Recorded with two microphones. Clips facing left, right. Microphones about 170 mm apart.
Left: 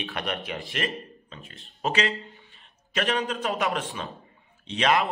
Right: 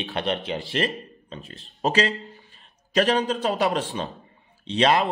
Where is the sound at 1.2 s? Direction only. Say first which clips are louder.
Right 6 dB; 35° right (ahead or behind).